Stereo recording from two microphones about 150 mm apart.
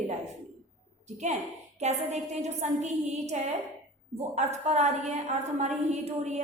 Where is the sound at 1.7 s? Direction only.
45° right (ahead or behind).